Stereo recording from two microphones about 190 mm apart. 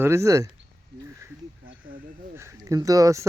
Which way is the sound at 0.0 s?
15° right (ahead or behind).